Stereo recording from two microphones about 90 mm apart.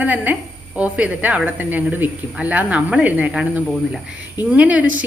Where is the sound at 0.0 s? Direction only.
20° right (ahead or behind).